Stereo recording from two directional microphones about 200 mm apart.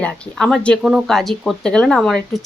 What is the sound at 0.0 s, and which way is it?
A woman's voice, centre (ahead or behind).